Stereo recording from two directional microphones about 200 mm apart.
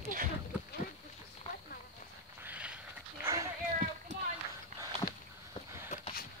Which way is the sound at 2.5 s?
5° right (ahead or behind).